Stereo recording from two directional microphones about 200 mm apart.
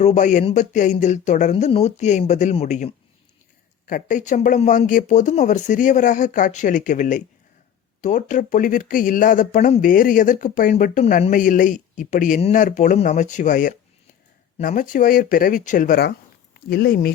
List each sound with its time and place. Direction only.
0.0 s speech: 35° left (ahead or behind)